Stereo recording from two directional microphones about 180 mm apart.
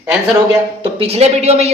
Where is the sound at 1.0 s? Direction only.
35° right (ahead or behind).